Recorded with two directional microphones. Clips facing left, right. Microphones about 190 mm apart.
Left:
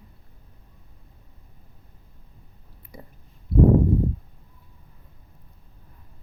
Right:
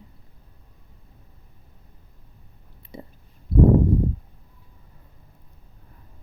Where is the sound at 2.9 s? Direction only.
25° right (ahead or behind).